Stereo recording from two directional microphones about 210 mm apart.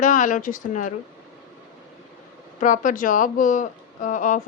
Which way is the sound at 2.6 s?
40° left (ahead or behind).